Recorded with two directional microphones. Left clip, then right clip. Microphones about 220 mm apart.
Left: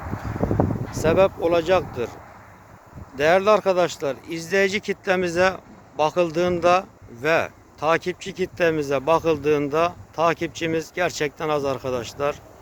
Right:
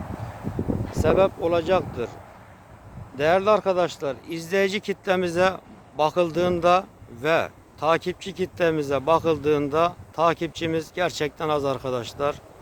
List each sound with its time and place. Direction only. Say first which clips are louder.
1.0 s speech: left 2 dB; 10° left (ahead or behind)
3.2 s speech: left 2 dB; 10° left (ahead or behind)